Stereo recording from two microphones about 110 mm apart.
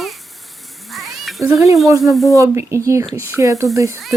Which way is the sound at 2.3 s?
25° right (ahead or behind).